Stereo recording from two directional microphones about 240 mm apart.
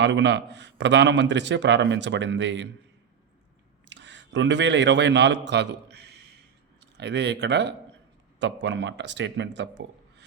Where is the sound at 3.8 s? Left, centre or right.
Right.